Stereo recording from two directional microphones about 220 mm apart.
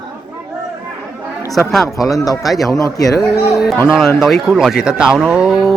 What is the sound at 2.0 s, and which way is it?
Speech, 15° left (ahead or behind).